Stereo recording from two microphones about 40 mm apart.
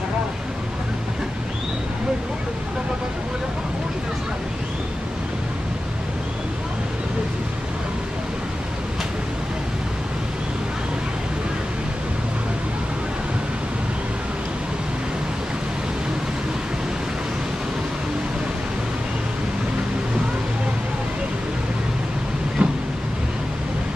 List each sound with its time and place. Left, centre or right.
22.6 s vehicle: right